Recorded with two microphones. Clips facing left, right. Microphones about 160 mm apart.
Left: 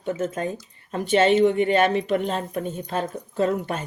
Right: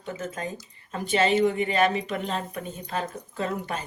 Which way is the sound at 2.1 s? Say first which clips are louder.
Left 6 dB; 40° left (ahead or behind).